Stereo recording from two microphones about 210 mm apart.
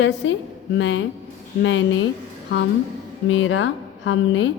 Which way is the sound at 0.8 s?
60° left (ahead or behind).